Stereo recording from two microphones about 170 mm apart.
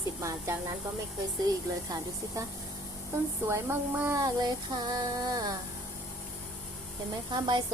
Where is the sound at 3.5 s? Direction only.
15° right (ahead or behind).